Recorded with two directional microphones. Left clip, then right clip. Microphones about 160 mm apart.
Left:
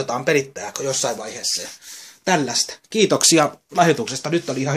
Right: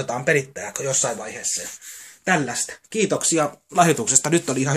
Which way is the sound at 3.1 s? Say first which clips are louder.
Left 7 dB; 60° left (ahead or behind).